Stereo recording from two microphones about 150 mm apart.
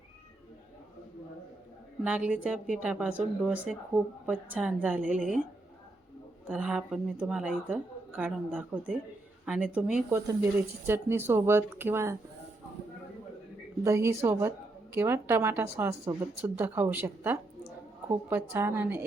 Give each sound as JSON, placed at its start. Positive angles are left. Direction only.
{"t": 2.0, "sound": "a woman's voice", "side_deg": -10}
{"t": 6.5, "sound": "a woman's voice", "side_deg": -5}
{"t": 13.8, "sound": "a woman's voice", "side_deg": -20}